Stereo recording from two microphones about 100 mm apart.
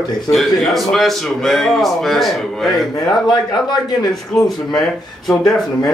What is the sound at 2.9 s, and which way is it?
Speech, 45° left (ahead or behind).